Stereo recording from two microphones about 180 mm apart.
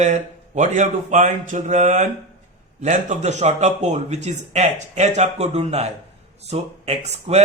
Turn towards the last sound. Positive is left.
turn(degrees=-35)  # may be behind; listen again after turning